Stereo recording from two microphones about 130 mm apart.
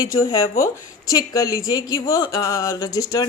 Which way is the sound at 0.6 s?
25° left (ahead or behind).